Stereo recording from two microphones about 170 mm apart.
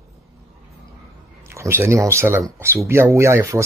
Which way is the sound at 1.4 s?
15° right (ahead or behind).